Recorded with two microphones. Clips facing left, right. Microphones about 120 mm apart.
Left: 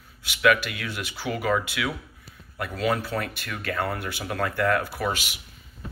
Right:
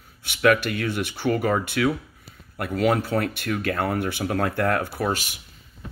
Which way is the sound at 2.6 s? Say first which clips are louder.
Right 4 dB; 60° right (ahead or behind).